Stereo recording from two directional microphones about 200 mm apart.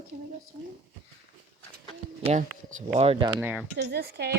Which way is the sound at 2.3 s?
35° right (ahead or behind).